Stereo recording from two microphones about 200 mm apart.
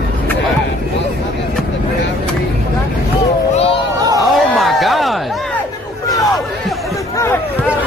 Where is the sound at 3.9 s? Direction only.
20° right (ahead or behind).